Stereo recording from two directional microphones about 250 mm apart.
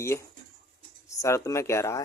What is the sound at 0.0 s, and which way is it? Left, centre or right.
Speech, centre.